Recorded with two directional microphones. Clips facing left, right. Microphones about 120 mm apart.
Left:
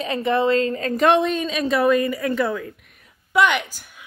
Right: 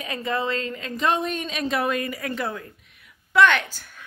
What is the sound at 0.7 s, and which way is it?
Speech, 45° left (ahead or behind).